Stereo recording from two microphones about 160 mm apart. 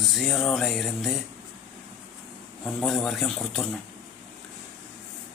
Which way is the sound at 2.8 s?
Centre (ahead or behind).